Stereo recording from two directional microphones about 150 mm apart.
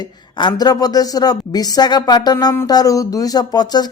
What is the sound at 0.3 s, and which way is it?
Speech, 30° left (ahead or behind).